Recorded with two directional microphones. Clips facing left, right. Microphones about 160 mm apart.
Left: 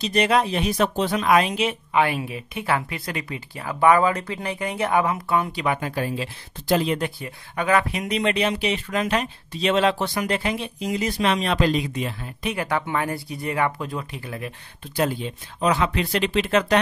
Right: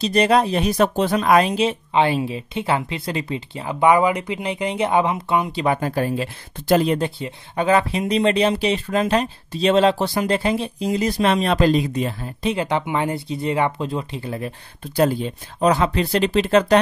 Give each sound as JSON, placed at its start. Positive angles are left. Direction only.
{"t": 0.0, "sound": "speech", "side_deg": -35}
{"t": 5.6, "sound": "speech", "side_deg": -35}
{"t": 7.0, "sound": "speech", "side_deg": -25}
{"t": 12.5, "sound": "speech", "side_deg": -20}
{"t": 15.0, "sound": "speech", "side_deg": -40}